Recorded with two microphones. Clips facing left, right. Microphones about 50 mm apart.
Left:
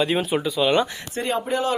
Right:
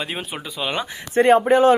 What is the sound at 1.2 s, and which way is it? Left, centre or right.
Speech, right.